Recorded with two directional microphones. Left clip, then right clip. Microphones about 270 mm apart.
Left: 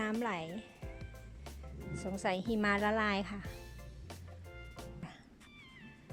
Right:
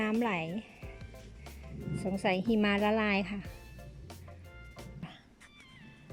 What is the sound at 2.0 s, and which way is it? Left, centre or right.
A woman's voice, centre.